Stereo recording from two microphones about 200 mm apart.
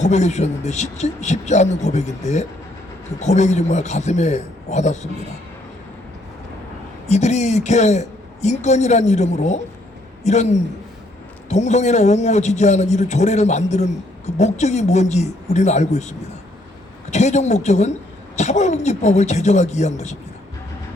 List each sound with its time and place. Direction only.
0.0 s a man's voice: 35° left (ahead or behind)
7.1 s a man's voice: 35° left (ahead or behind)